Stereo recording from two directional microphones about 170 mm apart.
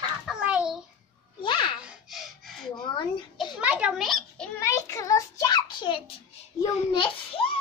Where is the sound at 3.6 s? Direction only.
10° right (ahead or behind).